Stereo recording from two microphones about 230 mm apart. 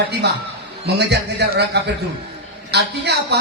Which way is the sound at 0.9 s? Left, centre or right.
Right.